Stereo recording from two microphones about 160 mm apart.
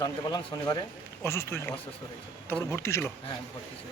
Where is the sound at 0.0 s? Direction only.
25° left (ahead or behind).